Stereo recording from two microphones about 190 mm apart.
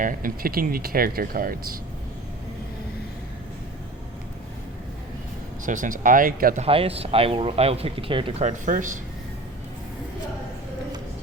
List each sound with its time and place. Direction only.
0.0 s speech: 45° right (ahead or behind)
5.6 s speech: 45° right (ahead or behind)
6.7 s speech: 30° right (ahead or behind)